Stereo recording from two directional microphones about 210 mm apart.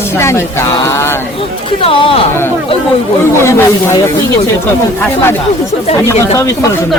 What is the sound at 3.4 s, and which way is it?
Speech, 15° left (ahead or behind).